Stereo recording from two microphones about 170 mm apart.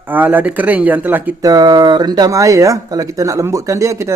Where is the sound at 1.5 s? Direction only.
25° right (ahead or behind).